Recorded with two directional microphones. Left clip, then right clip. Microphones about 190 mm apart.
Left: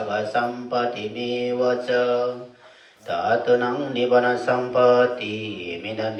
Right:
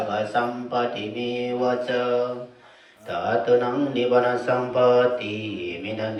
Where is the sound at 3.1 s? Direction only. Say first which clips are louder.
Left 1 dB; 25° left (ahead or behind).